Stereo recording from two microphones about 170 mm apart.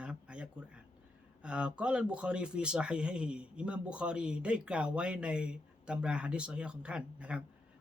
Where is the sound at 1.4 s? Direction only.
5° right (ahead or behind).